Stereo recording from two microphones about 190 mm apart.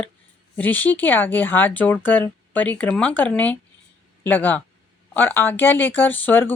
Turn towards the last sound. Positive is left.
turn(degrees=10)  # may be behind; listen again after turning